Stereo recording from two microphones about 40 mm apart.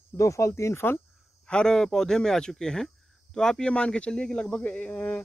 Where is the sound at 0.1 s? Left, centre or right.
Left.